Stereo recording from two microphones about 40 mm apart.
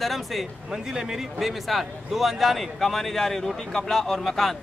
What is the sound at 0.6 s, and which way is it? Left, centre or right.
Speech, centre.